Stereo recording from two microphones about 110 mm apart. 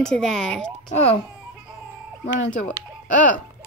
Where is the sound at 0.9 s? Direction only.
75° left (ahead or behind).